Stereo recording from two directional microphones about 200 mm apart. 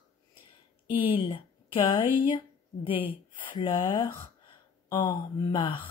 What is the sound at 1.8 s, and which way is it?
Speech, 25° left (ahead or behind).